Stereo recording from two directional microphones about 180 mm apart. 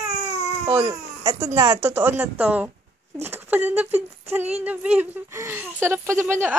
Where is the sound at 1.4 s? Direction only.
15° right (ahead or behind).